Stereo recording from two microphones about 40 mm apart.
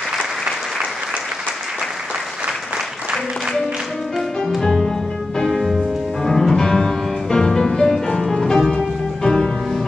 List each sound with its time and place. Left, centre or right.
4.6 s music: centre
8.2 s music: centre